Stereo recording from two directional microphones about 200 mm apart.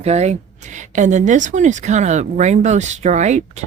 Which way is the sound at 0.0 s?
35° right (ahead or behind).